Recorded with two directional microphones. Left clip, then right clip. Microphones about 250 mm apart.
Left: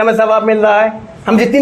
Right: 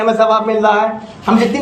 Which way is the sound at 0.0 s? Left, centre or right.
Left.